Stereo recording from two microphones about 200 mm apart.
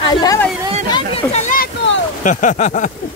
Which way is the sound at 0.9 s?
30° left (ahead or behind).